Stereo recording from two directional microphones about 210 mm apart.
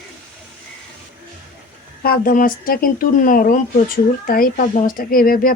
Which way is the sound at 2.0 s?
45° left (ahead or behind).